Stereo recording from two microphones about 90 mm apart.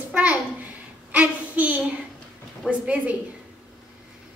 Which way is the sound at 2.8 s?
15° right (ahead or behind).